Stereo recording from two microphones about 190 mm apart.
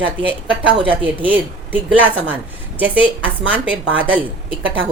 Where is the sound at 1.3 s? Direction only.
10° right (ahead or behind).